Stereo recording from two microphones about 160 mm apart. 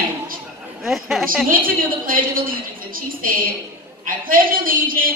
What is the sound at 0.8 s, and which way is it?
Speech, centre (ahead or behind).